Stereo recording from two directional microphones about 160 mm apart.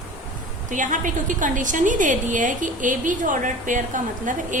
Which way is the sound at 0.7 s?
55° right (ahead or behind).